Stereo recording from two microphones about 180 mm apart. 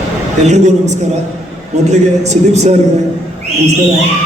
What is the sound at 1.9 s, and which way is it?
Speech, 40° right (ahead or behind).